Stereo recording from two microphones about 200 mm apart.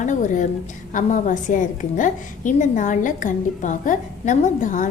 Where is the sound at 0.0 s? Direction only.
40° left (ahead or behind).